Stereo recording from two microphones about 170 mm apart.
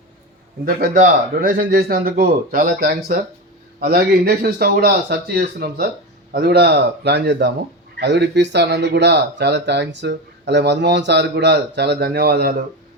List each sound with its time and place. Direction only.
0.6 s speech: 60° right (ahead or behind)
3.8 s a man's voice: 65° right (ahead or behind)